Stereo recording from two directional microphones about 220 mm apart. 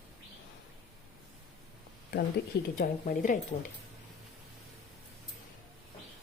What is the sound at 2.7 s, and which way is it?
Speech, 45° left (ahead or behind).